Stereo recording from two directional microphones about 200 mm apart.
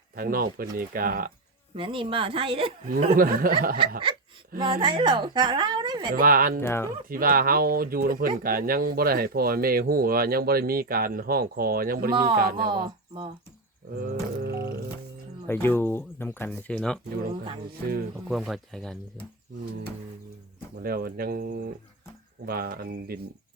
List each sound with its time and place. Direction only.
0.2 s speech: 45° right (ahead or behind)
1.7 s a woman's voice: 25° right (ahead or behind)
2.9 s speech: 45° right (ahead or behind)
4.5 s a woman's voice: 25° right (ahead or behind)
6.1 s speech: 45° right (ahead or behind)
6.6 s speech: 10° left (ahead or behind)
7.1 s speech: 45° right (ahead or behind)
12.1 s a woman's voice: 25° right (ahead or behind)
12.4 s speech: 50° right (ahead or behind)
12.6 s a woman's voice: 25° right (ahead or behind)
14.4 s speech: 55° right (ahead or behind)
15.4 s speech: 10° left (ahead or behind)
18.3 s speech: centre (ahead or behind)
20.8 s speech: 50° right (ahead or behind)